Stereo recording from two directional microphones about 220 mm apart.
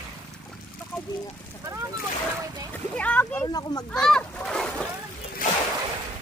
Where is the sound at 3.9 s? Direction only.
5° left (ahead or behind).